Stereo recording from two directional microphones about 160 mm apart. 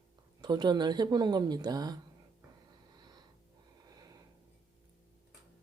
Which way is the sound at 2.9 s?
25° right (ahead or behind).